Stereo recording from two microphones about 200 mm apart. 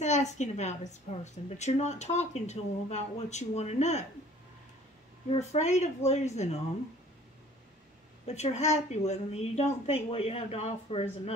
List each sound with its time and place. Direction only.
0.0 s a woman's voice: 35° left (ahead or behind)
5.3 s speech: 35° left (ahead or behind)
8.3 s speech: 35° left (ahead or behind)